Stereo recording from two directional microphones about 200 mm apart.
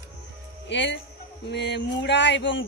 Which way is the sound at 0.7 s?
65° left (ahead or behind).